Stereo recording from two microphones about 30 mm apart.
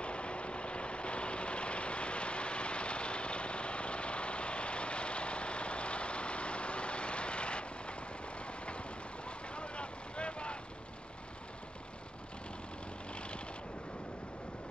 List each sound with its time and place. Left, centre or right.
0.0 s vehicle: left